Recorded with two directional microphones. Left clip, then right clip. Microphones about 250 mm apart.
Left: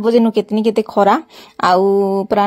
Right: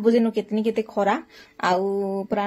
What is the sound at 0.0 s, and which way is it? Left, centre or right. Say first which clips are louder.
Speech: left 7 dB; left.